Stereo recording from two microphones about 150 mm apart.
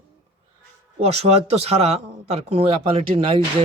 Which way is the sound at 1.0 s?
40° right (ahead or behind).